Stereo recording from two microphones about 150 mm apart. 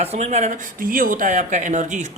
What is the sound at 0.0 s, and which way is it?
Speech, 45° right (ahead or behind).